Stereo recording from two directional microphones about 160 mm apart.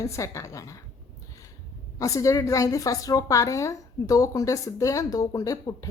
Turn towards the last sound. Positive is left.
turn(degrees=20)  # may be behind; listen again after turning